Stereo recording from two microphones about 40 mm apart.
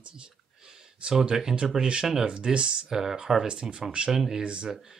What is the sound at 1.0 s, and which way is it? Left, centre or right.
Speech, right.